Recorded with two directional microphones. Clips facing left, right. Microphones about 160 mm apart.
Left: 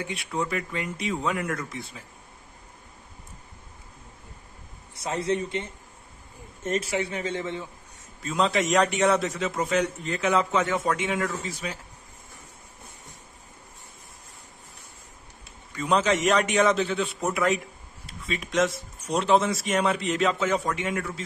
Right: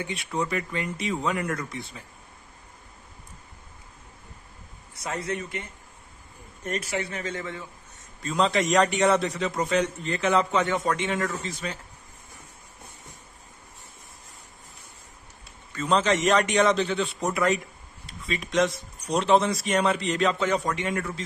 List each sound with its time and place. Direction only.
0.0 s a man's voice: centre (ahead or behind)
4.9 s a man's voice: 30° left (ahead or behind)
6.9 s speech: 10° left (ahead or behind)
7.3 s a man's voice: 20° left (ahead or behind)
8.2 s a man's voice: 5° left (ahead or behind)
15.7 s a man's voice: 10° left (ahead or behind)